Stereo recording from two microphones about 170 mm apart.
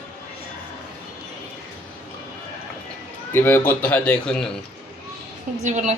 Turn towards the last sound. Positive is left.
turn(degrees=-45)  # may be behind; listen again after turning